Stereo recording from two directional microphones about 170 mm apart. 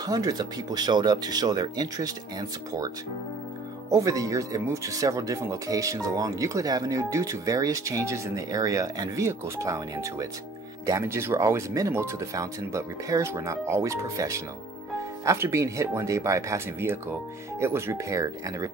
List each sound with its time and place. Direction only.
0.0 s speech: 20° right (ahead or behind)
3.9 s speech: 20° right (ahead or behind)